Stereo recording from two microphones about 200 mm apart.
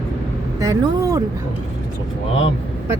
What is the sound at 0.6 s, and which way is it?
Speech, 15° right (ahead or behind).